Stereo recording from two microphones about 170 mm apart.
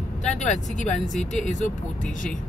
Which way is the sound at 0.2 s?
40° left (ahead or behind).